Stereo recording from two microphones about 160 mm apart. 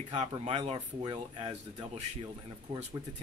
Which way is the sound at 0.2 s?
40° right (ahead or behind).